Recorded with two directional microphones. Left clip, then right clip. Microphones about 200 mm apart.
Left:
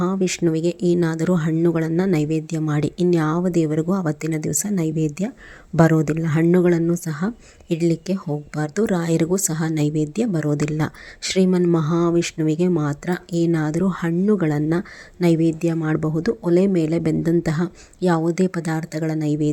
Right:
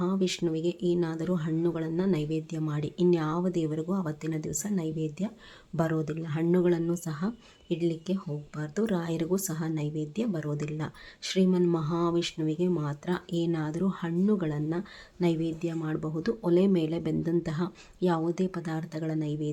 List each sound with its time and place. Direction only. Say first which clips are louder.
0.0 s speech: left 8 dB; 35° left (ahead or behind)